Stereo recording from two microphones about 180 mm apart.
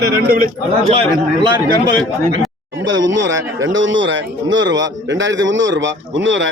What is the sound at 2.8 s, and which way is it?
A man's voice, 90° right.